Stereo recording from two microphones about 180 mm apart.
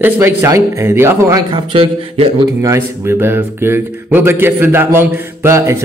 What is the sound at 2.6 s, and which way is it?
Speech, 15° right (ahead or behind).